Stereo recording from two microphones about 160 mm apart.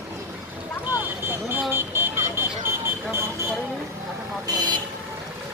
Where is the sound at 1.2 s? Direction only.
15° right (ahead or behind).